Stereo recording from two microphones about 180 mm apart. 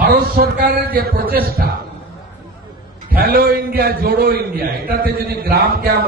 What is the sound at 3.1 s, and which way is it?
A man's voice, 55° right (ahead or behind).